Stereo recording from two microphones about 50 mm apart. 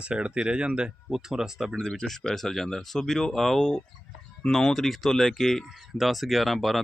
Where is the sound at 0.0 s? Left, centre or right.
Right.